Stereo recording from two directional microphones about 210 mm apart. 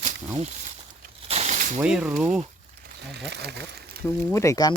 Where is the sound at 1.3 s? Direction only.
30° right (ahead or behind).